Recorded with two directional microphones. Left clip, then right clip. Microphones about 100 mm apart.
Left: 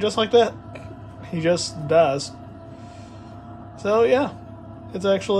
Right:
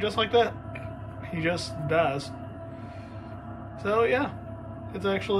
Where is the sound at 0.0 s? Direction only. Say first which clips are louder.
Left 6 dB; 30° left (ahead or behind).